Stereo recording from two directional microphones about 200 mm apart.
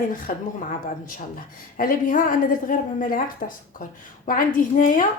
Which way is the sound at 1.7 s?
45° left (ahead or behind).